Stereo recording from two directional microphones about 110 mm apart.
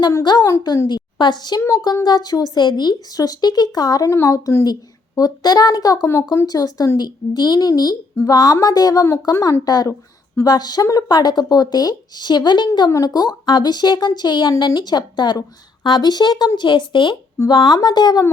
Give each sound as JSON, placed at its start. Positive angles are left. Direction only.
{"t": 0.0, "sound": "speech", "side_deg": 40}